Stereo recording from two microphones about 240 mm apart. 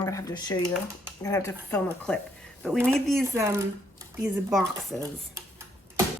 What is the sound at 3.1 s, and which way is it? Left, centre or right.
Speech, centre.